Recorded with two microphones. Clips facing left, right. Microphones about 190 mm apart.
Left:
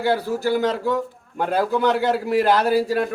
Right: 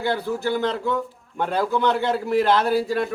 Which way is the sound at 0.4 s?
10° left (ahead or behind).